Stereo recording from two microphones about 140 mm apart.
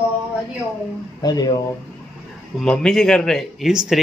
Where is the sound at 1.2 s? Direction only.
30° left (ahead or behind).